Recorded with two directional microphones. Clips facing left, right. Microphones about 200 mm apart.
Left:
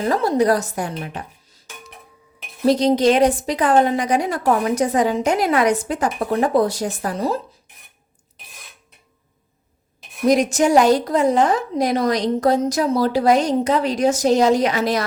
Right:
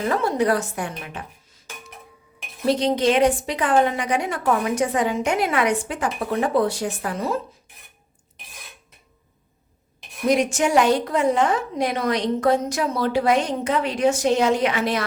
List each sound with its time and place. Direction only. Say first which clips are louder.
0.1 s a woman's voice: left 4 dB; 35° left (ahead or behind)
2.6 s a woman's voice: left 4 dB; 40° left (ahead or behind)
10.2 s a woman's voice: left 4 dB; 40° left (ahead or behind)